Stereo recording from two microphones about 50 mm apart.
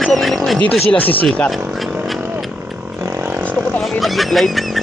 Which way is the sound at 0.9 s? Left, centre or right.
Left.